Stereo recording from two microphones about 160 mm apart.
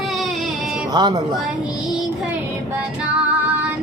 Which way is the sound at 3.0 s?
10° right (ahead or behind).